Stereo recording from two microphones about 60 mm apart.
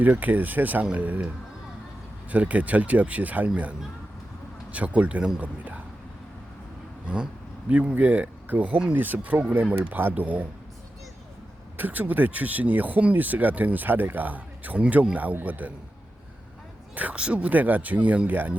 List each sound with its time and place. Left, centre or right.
0.0 s speech: right
2.3 s speech: right
4.7 s a man's voice: right
7.7 s speech: right
11.8 s speech: right
16.9 s speech: right